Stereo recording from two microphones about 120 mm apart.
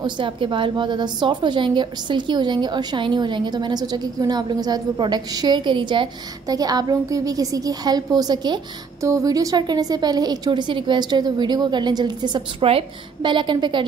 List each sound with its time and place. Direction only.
0.0 s a woman's voice: 45° right (ahead or behind)